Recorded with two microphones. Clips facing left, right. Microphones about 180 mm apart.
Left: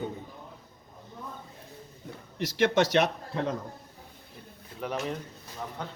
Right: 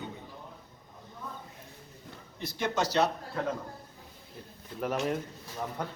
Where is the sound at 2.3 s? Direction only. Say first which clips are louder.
Left 7 dB; 85° left.